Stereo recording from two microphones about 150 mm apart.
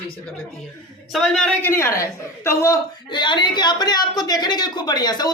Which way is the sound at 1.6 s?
15° left (ahead or behind).